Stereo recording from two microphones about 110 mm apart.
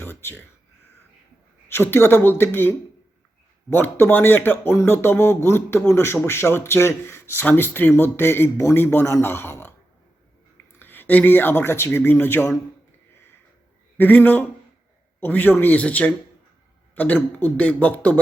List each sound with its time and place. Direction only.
0.0 s a sound: 20° left (ahead or behind)
1.6 s speech: 20° left (ahead or behind)
10.8 s speech: 15° left (ahead or behind)
14.0 s speech: 15° left (ahead or behind)